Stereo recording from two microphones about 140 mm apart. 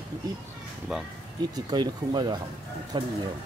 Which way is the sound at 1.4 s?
30° right (ahead or behind).